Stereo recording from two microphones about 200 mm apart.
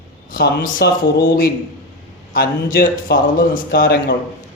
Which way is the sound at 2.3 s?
45° left (ahead or behind).